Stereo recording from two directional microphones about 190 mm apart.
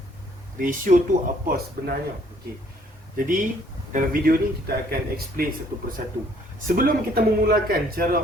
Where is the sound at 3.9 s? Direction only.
50° right (ahead or behind).